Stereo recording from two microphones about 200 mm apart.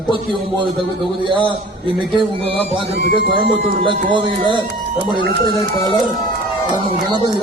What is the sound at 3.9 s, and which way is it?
Speech, 25° right (ahead or behind).